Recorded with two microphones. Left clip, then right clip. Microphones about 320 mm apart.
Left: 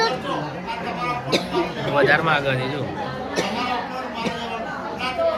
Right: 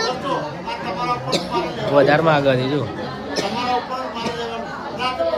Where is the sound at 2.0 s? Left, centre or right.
Centre.